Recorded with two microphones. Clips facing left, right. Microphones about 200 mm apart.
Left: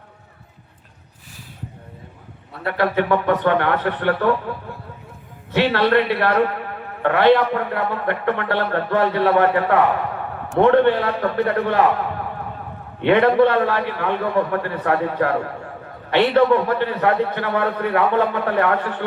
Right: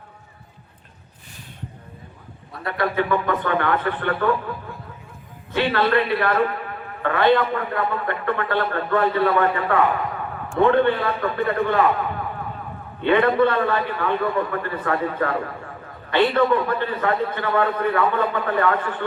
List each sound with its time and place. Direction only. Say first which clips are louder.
2.6 s a man's voice: left 3 dB; 70° left (ahead or behind)
5.5 s a man's voice: left 3 dB; 70° left (ahead or behind)
13.0 s a man's voice: left 3 dB; 70° left (ahead or behind)